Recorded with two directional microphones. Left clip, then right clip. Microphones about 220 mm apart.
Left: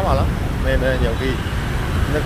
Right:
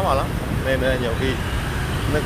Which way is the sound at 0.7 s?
5° right (ahead or behind).